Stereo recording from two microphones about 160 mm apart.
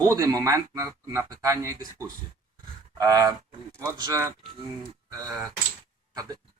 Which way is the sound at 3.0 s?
25° right (ahead or behind).